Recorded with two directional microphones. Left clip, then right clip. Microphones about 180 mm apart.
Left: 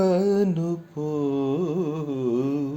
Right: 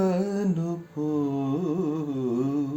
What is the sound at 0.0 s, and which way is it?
Mantra, 25° left (ahead or behind).